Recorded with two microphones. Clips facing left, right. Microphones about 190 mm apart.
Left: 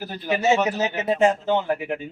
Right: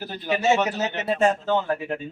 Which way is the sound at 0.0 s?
15° left (ahead or behind).